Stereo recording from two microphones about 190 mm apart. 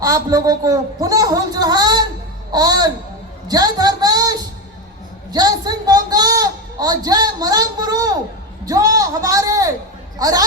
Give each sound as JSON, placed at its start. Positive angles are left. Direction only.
{"t": 0.0, "sound": "a child's voice", "side_deg": -20}
{"t": 3.5, "sound": "a sound", "side_deg": -20}
{"t": 8.6, "sound": "a man's voice", "side_deg": -20}